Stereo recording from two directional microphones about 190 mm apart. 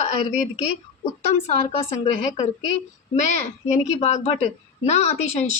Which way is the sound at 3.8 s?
35° left (ahead or behind).